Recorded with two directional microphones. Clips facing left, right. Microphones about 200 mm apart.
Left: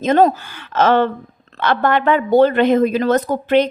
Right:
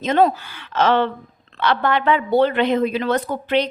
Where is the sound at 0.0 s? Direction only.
45° left (ahead or behind).